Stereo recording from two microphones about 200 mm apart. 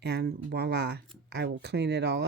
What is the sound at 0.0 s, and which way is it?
Speech, 55° right (ahead or behind).